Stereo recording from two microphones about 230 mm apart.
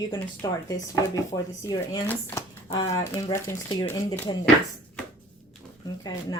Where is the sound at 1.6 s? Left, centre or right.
Centre.